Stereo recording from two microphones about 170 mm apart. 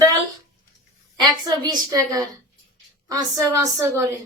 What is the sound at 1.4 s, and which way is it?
A woman's voice, 25° right (ahead or behind).